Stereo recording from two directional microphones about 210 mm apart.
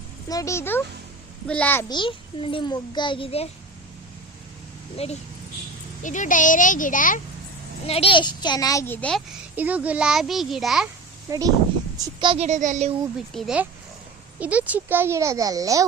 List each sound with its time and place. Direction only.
0.3 s speech: 15° left (ahead or behind)
1.9 s a child's voice: 25° left (ahead or behind)
6.0 s speech: 35° left (ahead or behind)
7.9 s a child's voice: 25° left (ahead or behind); by 9.2 s 5° left (ahead or behind)
9.6 s speech: 5° right (ahead or behind)
11.3 s a child's voice: 15° right (ahead or behind); by 13.0 s 35° right (ahead or behind)
13.3 s a child's voice: centre (ahead or behind)